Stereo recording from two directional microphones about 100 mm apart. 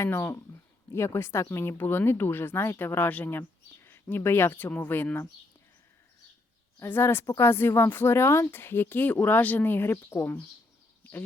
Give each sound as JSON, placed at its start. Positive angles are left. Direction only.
{"t": 0.0, "sound": "speech", "side_deg": 25}
{"t": 6.8, "sound": "speech", "side_deg": 20}